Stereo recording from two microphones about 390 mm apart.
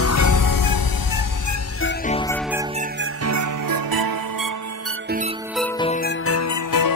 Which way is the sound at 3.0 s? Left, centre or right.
Right.